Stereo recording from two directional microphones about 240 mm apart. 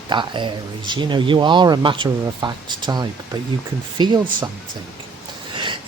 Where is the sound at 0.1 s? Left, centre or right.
Centre.